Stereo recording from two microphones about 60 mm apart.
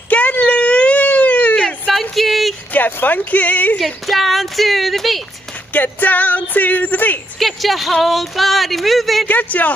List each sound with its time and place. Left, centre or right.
0.1 s a sound: left
1.9 s a sound: centre
2.7 s speech: left
3.8 s speech: centre
5.7 s speech: left
7.3 s speech: centre
9.3 s speech: left